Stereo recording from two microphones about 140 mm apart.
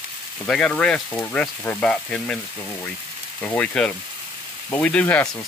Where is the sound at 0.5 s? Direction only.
5° left (ahead or behind).